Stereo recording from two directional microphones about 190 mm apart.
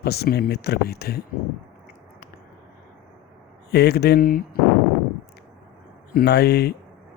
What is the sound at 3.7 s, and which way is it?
Speech, 60° left (ahead or behind).